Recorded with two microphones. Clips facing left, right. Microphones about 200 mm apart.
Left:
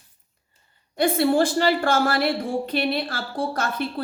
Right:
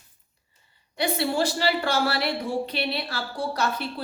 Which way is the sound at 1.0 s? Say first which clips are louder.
Left 6 dB; 50° left (ahead or behind).